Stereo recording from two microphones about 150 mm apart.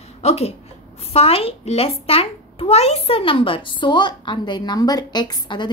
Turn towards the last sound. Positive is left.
turn(degrees=30)  # may be behind; listen again after turning